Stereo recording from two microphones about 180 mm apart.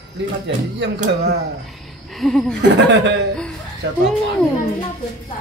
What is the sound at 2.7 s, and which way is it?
Speech, 75° right (ahead or behind).